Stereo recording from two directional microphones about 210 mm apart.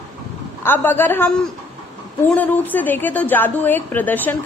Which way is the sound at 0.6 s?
10° left (ahead or behind).